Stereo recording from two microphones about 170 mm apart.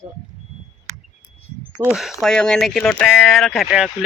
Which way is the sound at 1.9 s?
Centre (ahead or behind).